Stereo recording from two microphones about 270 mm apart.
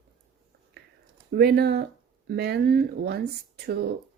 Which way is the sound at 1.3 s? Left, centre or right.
Right.